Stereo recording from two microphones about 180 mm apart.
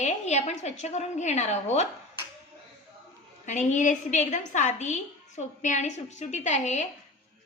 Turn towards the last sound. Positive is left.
turn(degrees=40)  # may be behind; listen again after turning